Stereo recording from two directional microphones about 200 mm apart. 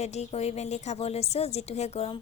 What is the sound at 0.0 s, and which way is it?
A woman's voice, 35° left (ahead or behind).